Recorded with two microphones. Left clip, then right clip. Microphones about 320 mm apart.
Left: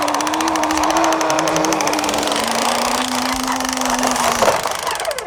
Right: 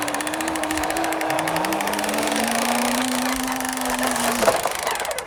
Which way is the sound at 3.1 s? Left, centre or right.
Centre.